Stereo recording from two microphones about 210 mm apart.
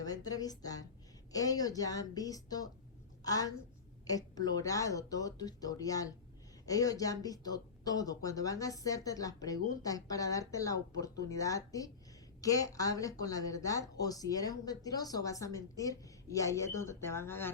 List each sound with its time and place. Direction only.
0.0 s speech: 15° left (ahead or behind)